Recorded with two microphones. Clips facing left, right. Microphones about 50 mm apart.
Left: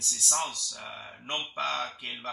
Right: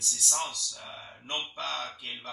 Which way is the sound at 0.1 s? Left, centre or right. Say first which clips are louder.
Left 2 dB; left.